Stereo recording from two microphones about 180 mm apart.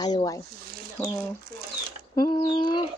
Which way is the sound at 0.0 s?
25° left (ahead or behind).